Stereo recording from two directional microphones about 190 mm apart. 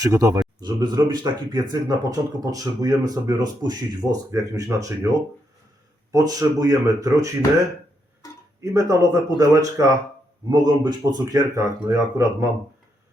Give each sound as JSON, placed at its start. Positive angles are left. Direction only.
{"t": 0.0, "sound": "speech", "side_deg": -20}
{"t": 8.6, "sound": "speech", "side_deg": -15}